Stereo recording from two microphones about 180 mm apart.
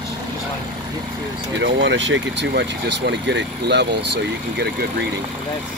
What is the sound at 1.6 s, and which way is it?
Speech, 90° right.